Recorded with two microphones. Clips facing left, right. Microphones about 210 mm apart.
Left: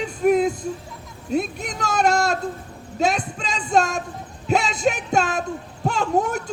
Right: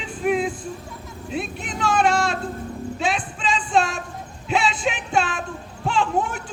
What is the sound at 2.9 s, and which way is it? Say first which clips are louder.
Music: left 6 dB; 40° left (ahead or behind).